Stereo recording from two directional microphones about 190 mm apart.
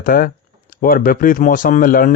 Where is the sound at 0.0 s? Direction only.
50° left (ahead or behind).